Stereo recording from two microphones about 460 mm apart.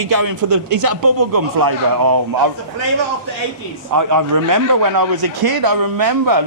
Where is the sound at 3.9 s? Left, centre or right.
Right.